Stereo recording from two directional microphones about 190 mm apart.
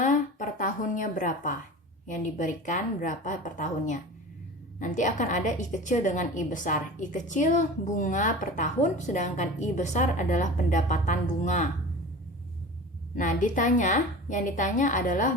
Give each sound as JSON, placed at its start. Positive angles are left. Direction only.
{"t": 0.0, "sound": "a sound", "side_deg": 40}
{"t": 2.0, "sound": "a woman's voice", "side_deg": 40}
{"t": 13.1, "sound": "a woman's voice", "side_deg": 45}